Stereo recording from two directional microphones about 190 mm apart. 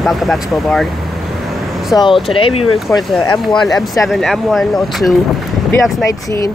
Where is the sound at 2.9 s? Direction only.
10° left (ahead or behind).